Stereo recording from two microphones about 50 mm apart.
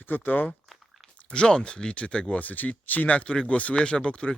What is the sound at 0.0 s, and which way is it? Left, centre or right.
Speech, left.